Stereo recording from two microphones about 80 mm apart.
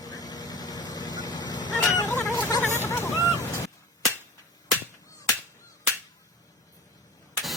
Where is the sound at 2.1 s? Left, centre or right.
Left.